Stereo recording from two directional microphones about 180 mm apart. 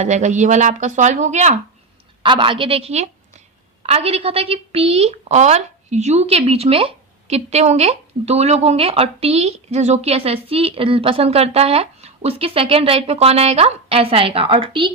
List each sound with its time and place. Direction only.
0.0 s a woman's voice: 40° right (ahead or behind)
2.2 s a woman's voice: 30° right (ahead or behind)